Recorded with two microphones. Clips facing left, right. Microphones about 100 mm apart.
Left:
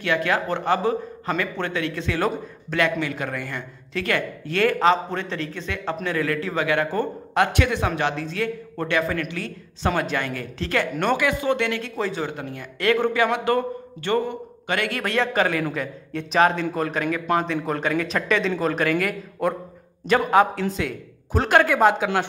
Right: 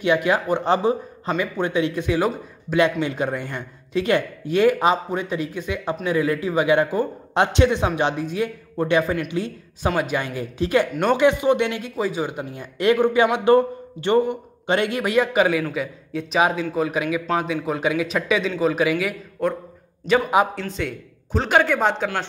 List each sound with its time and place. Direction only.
0.0 s a man's voice: 15° right (ahead or behind); by 22.2 s 5° left (ahead or behind)